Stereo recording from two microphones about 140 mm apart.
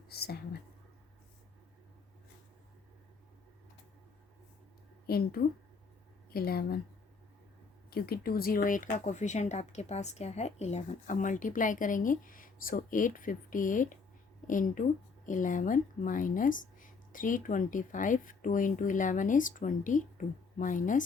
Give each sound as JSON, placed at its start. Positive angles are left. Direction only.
{"t": 0.1, "sound": "a woman's voice", "side_deg": 90}
{"t": 5.0, "sound": "a woman's voice", "side_deg": 90}
{"t": 7.9, "sound": "speech", "side_deg": 90}